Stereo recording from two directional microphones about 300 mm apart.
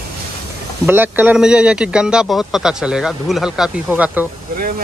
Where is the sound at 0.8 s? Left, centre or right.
Centre.